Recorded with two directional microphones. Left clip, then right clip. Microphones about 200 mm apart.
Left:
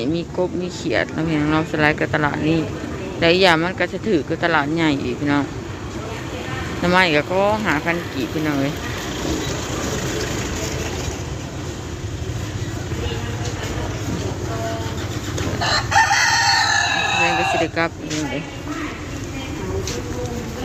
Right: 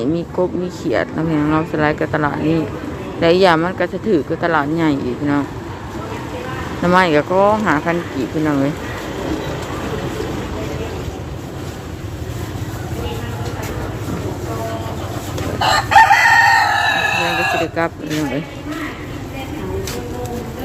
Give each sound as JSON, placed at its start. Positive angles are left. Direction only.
{"t": 0.0, "sound": "speech", "side_deg": -15}
{"t": 6.8, "sound": "speech", "side_deg": -15}
{"t": 15.6, "sound": "crowing", "side_deg": -45}
{"t": 17.7, "sound": "speech", "side_deg": -5}